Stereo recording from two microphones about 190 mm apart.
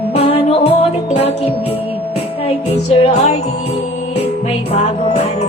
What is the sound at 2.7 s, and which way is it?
Music, 35° left (ahead or behind).